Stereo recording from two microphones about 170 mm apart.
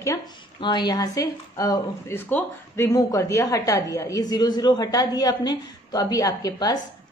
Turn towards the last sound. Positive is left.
turn(degrees=20)  # may be behind; listen again after turning